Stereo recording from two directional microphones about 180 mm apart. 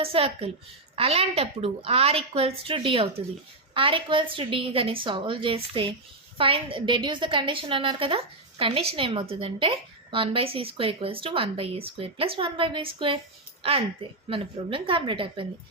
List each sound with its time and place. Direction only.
0.0 s a woman's voice: 30° right (ahead or behind)